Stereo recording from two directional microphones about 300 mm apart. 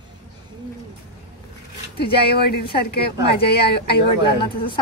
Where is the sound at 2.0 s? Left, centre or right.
Left.